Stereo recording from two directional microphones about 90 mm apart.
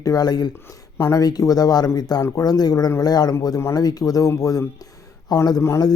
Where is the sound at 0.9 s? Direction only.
30° left (ahead or behind).